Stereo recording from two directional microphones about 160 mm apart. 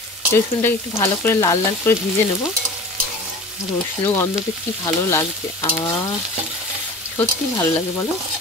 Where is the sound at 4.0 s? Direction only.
15° left (ahead or behind).